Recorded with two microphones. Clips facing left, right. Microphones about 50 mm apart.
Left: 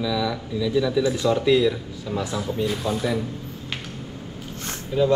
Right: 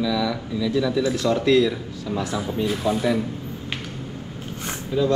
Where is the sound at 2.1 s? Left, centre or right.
Centre.